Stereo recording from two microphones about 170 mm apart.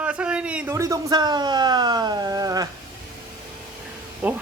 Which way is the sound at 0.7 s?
20° right (ahead or behind).